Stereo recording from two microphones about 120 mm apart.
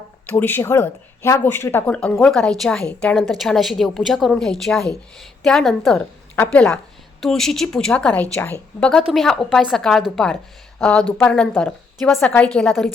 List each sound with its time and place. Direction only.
0.3 s speech: 15° left (ahead or behind)
2.2 s a woman's voice: 5° left (ahead or behind)
8.9 s a woman's voice: centre (ahead or behind)